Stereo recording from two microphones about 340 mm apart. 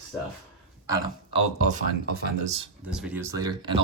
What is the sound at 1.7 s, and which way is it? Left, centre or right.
Speech, right.